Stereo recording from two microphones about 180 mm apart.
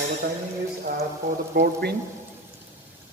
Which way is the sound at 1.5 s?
60° right (ahead or behind).